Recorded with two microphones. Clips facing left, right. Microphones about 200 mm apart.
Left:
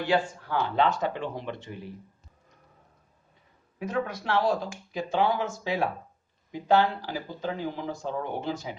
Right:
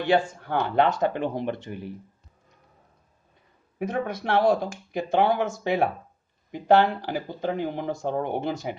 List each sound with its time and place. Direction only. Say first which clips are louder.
0.1 s speech: right 4 dB; 55° right (ahead or behind)
3.8 s speech: right 2 dB; 55° right (ahead or behind)